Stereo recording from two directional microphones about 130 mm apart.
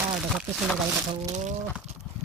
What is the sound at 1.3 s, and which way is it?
Speech, 65° right (ahead or behind).